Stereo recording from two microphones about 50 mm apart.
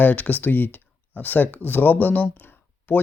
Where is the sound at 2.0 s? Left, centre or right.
Left.